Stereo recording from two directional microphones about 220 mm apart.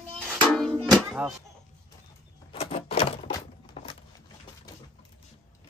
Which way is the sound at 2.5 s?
25° left (ahead or behind).